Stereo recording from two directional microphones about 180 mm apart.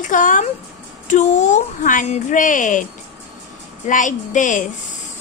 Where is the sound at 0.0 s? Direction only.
45° left (ahead or behind).